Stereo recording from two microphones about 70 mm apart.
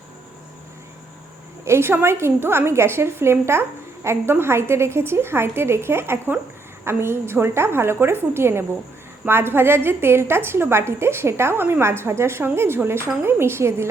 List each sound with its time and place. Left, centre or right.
1.6 s a woman's voice: right